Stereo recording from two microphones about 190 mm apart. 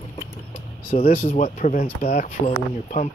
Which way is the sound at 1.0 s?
45° left (ahead or behind).